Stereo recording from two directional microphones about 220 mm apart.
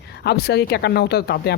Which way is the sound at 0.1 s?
50° left (ahead or behind).